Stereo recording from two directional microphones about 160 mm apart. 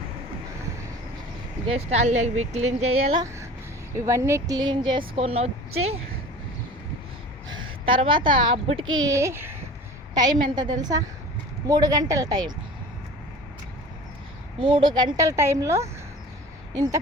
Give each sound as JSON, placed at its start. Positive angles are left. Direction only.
{"t": 1.6, "sound": "speech", "side_deg": -40}
{"t": 3.2, "sound": "speech", "side_deg": -15}
{"t": 7.4, "sound": "a sound", "side_deg": -30}
{"t": 8.5, "sound": "speech", "side_deg": -40}
{"t": 9.0, "sound": "speech", "side_deg": -20}
{"t": 10.2, "sound": "speech", "side_deg": -25}
{"t": 14.6, "sound": "speech", "side_deg": -30}